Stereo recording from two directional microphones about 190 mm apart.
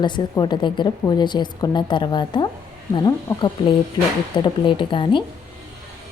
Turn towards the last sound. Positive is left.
turn(degrees=25)  # may be behind; listen again after turning